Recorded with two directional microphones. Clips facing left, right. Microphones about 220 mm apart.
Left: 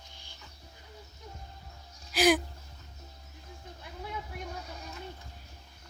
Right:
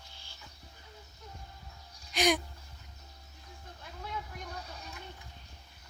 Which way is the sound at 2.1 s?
Centre (ahead or behind).